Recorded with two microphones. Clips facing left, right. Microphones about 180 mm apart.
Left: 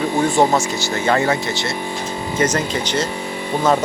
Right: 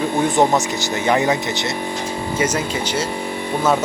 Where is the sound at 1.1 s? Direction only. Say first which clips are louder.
Even; 20° right (ahead or behind).